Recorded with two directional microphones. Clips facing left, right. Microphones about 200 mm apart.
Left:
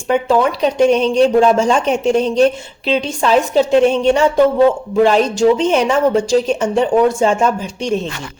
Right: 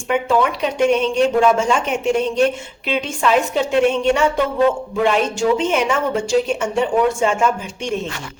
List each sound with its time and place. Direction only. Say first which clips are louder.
0.1 s speech: left 3 dB; 35° left (ahead or behind)